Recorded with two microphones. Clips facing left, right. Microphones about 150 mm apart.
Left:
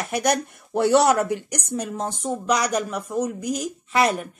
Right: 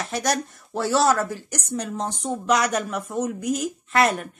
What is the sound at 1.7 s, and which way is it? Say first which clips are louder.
A woman's voice: even; 5° left (ahead or behind).